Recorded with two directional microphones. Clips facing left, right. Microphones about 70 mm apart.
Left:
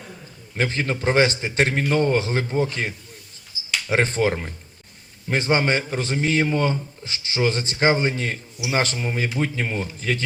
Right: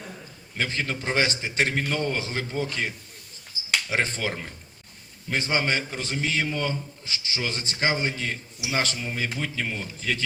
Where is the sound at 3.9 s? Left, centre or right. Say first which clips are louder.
Left 10 dB; left.